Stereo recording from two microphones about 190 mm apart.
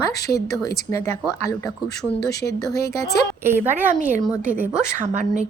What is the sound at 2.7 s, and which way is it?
Speech, 15° left (ahead or behind).